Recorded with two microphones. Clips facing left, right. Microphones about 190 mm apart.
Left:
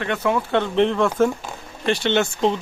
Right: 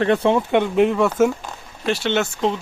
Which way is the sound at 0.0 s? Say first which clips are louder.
Right 5 dB; 30° right (ahead or behind).